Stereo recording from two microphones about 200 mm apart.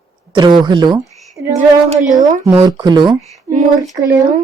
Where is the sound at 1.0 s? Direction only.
Centre (ahead or behind).